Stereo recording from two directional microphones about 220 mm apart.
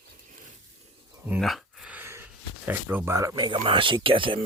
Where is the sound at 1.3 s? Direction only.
Centre (ahead or behind).